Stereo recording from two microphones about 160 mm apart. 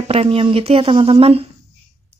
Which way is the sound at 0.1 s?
35° right (ahead or behind).